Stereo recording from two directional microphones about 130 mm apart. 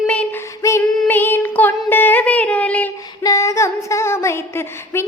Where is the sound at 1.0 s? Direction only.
15° left (ahead or behind).